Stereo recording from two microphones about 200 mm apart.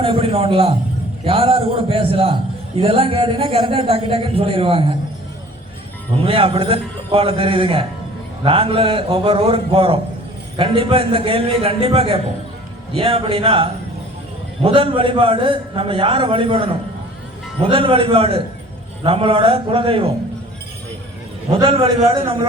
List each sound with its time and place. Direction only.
0.0 s a man's voice: 25° right (ahead or behind)
6.2 s a man's voice: 25° right (ahead or behind)
21.5 s a man's voice: 25° right (ahead or behind)